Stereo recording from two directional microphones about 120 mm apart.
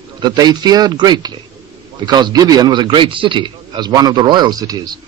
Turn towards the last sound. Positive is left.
turn(degrees=-30)  # may be behind; listen again after turning